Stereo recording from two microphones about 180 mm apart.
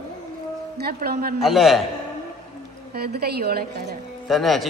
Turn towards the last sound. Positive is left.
turn(degrees=0)  # may be behind; listen again after turning